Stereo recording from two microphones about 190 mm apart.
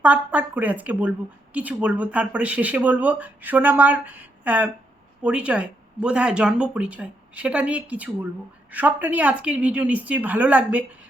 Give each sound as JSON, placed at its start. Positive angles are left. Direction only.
{"t": 0.0, "sound": "speech", "side_deg": -5}